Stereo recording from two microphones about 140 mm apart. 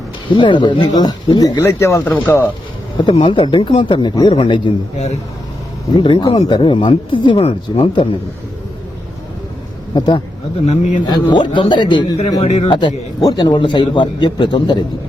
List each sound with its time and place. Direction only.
0.3 s speech: 35° left (ahead or behind); by 2.5 s 15° left (ahead or behind)
3.0 s a man's voice: 40° left (ahead or behind)
6.0 s a man's voice: 35° left (ahead or behind)
10.7 s a man's voice: 55° left (ahead or behind)
11.0 s a man's voice: 30° left (ahead or behind)
12.4 s speech: 45° left (ahead or behind)
12.6 s a man's voice: 30° left (ahead or behind)